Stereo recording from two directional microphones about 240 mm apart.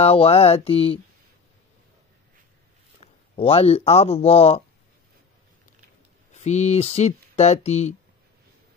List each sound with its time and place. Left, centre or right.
0.0 s speech: left
3.0 s speech: left
6.3 s speech: left